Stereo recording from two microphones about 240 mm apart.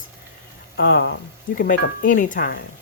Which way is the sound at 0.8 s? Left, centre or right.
Left.